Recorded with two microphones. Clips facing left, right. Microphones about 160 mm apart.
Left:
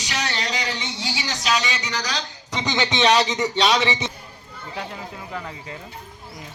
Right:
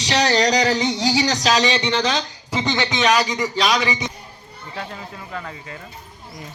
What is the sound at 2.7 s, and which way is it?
Speech, 25° left (ahead or behind).